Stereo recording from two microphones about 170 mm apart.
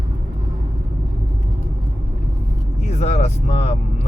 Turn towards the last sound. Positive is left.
turn(degrees=40)  # may be behind; listen again after turning